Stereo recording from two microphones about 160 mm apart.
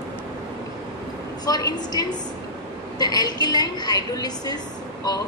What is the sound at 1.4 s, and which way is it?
A woman's voice, 25° left (ahead or behind).